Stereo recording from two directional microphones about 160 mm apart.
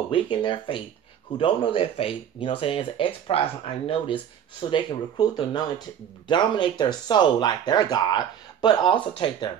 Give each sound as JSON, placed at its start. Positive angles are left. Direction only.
{"t": 0.1, "sound": "speech", "side_deg": 30}